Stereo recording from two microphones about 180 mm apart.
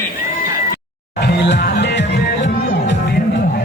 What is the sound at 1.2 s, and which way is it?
Music, 65° left (ahead or behind).